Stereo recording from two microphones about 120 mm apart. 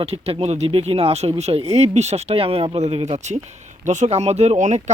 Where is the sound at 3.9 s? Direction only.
75° right (ahead or behind).